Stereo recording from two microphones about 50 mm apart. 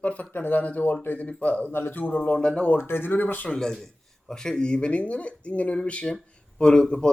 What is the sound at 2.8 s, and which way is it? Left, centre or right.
Speech, left.